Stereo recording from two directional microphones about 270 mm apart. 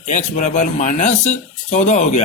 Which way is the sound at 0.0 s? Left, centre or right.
Left.